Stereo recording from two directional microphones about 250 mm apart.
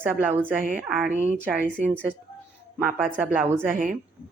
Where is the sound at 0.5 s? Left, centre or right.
Right.